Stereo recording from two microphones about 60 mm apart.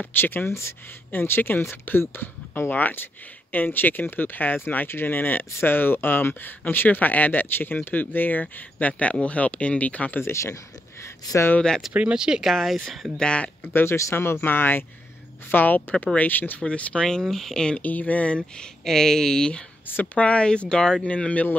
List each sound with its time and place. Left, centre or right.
0.2 s speech: left
0.5 s speech: left
1.1 s speech: left
10.2 s speech: left
11.9 s speech: centre
12.4 s speech: centre
13.2 s speech: centre
14.1 s speech: left
16.6 s speech: centre
17.0 s speech: centre
17.8 s speech: left
18.9 s speech: centre